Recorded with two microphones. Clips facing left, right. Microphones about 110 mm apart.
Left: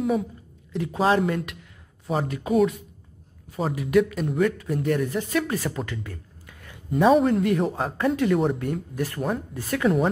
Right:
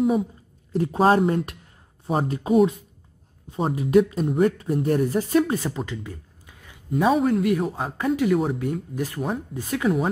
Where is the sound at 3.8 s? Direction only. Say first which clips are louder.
Right 3 dB; 30° right (ahead or behind).